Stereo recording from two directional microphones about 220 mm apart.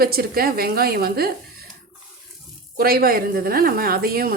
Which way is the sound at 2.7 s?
40° right (ahead or behind).